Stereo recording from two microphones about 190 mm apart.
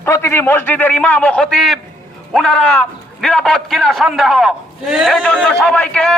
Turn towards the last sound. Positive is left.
turn(degrees=5)  # may be behind; listen again after turning